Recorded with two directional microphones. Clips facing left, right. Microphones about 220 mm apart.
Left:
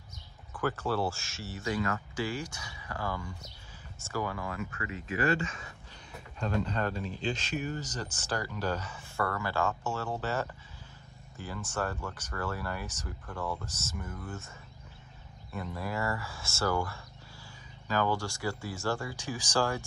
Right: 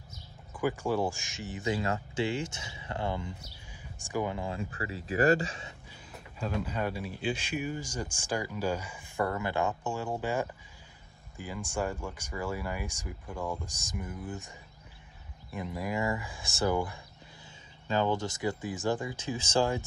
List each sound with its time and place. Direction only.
0.5 s speech: 10° right (ahead or behind); by 5.7 s 35° right (ahead or behind)
6.1 s speech: 5° right (ahead or behind)
15.5 s speech: 15° right (ahead or behind)